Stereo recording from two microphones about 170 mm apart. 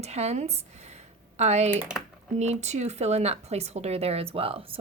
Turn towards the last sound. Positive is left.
turn(degrees=-35)  # may be behind; listen again after turning